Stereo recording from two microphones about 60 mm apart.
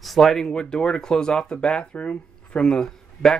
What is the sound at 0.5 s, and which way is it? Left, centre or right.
Speech, centre.